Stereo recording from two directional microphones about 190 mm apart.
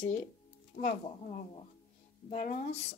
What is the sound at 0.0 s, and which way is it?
Speech, 40° left (ahead or behind).